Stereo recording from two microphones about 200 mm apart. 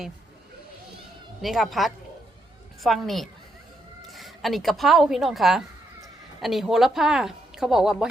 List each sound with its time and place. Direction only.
1.4 s speech: centre (ahead or behind)